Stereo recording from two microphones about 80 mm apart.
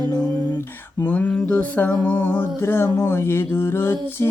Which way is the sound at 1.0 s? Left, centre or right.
Centre.